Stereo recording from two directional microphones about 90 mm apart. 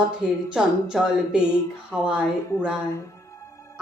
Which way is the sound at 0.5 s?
10° right (ahead or behind).